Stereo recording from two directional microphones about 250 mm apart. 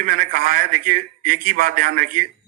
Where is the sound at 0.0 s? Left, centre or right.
Right.